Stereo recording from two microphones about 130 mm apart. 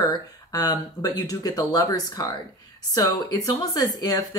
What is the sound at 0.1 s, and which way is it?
Speech, 30° left (ahead or behind).